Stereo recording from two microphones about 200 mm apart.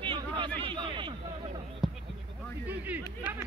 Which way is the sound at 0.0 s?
25° right (ahead or behind).